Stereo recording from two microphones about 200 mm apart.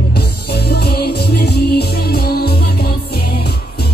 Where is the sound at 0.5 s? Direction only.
50° left (ahead or behind).